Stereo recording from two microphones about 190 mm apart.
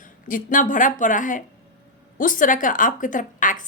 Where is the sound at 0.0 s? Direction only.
45° left (ahead or behind).